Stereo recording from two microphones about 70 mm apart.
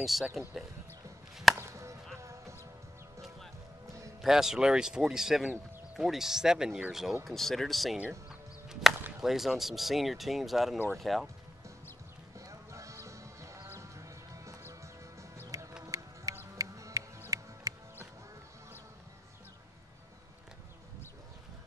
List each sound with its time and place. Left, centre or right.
0.0 s speech: centre
1.6 s chop: right
4.2 s speech: centre
8.3 s chop: centre
9.2 s speech: centre
12.4 s music: right